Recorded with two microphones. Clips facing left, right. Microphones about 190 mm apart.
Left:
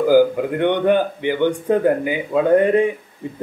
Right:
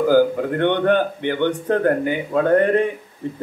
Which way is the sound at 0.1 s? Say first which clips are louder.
Left 4 dB; 10° left (ahead or behind).